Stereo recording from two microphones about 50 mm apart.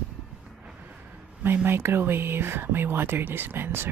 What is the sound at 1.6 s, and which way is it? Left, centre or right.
Speech, right.